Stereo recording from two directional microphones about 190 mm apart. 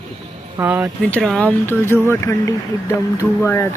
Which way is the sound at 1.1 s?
5° left (ahead or behind).